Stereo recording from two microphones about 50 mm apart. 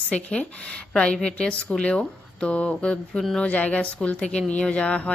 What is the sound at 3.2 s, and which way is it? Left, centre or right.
Speech, centre.